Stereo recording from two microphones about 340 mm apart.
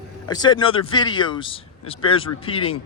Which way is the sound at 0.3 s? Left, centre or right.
Centre.